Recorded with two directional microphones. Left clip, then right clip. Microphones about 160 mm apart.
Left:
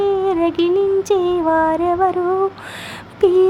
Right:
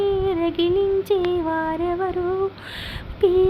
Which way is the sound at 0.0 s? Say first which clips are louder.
Left 5 dB; 10° left (ahead or behind).